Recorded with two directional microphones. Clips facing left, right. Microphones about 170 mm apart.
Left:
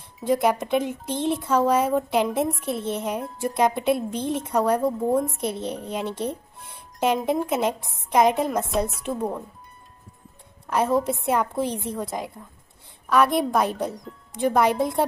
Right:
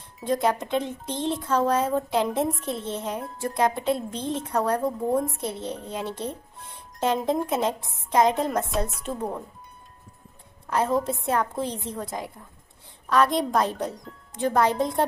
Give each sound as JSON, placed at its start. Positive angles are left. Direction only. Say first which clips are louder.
{"t": 0.2, "sound": "speech", "louder": "left 3 dB", "side_deg": 10}
{"t": 6.9, "sound": "music", "louder": "left 2 dB", "side_deg": 0}
{"t": 7.2, "sound": "speech", "louder": "left 1 dB", "side_deg": 10}
{"t": 8.6, "sound": "a woman's voice", "louder": "left 3 dB", "side_deg": 0}
{"t": 10.7, "sound": "speech", "louder": "left 2 dB", "side_deg": 10}